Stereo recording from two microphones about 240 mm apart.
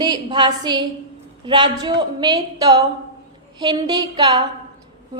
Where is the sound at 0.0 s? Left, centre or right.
Centre.